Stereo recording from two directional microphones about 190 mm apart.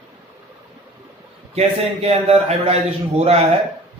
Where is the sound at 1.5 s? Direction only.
35° right (ahead or behind).